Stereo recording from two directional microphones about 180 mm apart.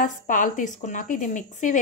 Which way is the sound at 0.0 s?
45° left (ahead or behind).